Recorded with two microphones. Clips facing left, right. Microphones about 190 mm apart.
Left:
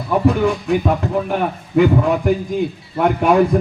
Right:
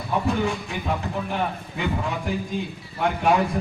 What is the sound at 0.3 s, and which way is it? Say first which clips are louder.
Speech: left 9 dB; 55° left (ahead or behind).